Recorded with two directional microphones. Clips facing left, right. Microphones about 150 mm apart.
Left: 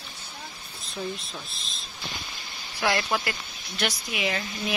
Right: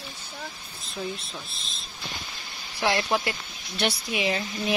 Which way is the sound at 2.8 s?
25° right (ahead or behind).